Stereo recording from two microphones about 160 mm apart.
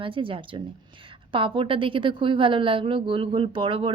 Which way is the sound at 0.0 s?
35° right (ahead or behind).